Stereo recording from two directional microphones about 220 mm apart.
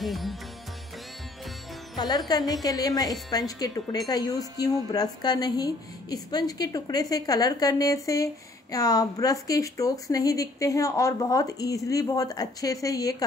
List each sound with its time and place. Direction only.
0.0 s music: centre (ahead or behind)
2.0 s speech: 15° left (ahead or behind)